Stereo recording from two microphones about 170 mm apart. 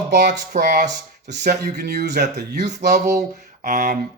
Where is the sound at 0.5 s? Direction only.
45° right (ahead or behind).